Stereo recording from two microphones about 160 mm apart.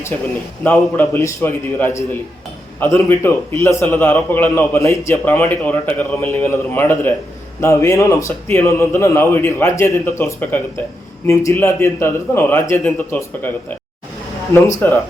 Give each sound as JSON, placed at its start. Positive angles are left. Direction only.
{"t": 0.6, "sound": "a man's voice", "side_deg": 10}
{"t": 3.1, "sound": "a man's voice", "side_deg": 15}